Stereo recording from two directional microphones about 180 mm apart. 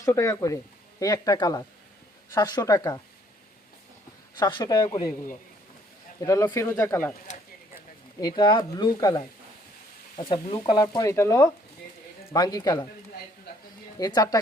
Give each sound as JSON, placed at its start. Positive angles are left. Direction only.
{"t": 0.0, "sound": "speech", "side_deg": 15}
{"t": 4.4, "sound": "speech", "side_deg": 25}
{"t": 6.1, "sound": "speech", "side_deg": 20}
{"t": 8.2, "sound": "speech", "side_deg": 25}
{"t": 14.0, "sound": "speech", "side_deg": 20}